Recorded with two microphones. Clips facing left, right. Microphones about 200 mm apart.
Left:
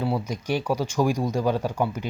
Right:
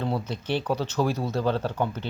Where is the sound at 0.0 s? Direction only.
10° left (ahead or behind).